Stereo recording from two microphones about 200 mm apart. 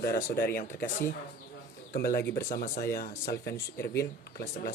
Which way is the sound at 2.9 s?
50° left (ahead or behind).